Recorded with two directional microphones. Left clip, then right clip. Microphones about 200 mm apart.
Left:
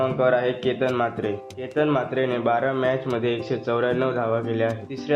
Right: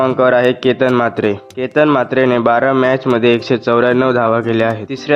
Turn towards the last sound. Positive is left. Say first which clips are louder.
# right 10 dB
turn(degrees=-50)  # may be behind; listen again after turning